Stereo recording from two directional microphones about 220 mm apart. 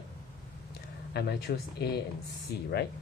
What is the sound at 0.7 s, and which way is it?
Speech, 50° left (ahead or behind).